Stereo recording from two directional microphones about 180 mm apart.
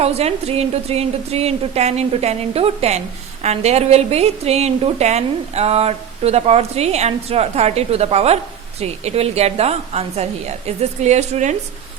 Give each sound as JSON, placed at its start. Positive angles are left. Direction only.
{"t": 0.0, "sound": "a woman's voice", "side_deg": -35}